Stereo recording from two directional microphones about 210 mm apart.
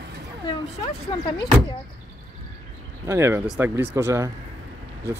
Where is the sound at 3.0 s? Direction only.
10° right (ahead or behind).